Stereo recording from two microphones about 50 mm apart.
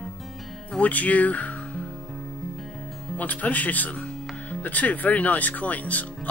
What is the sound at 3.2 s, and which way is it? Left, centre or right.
Speech, left.